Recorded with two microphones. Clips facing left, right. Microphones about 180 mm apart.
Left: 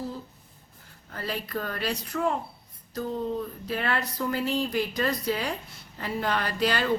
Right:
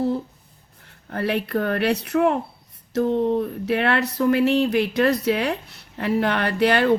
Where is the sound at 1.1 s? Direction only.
65° right (ahead or behind).